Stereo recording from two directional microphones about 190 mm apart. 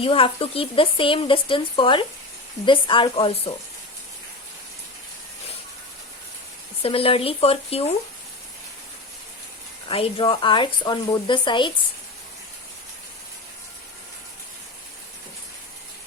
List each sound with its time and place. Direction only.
0.0 s speech: 30° left (ahead or behind)
6.8 s speech: 30° left (ahead or behind)
9.9 s speech: 30° left (ahead or behind)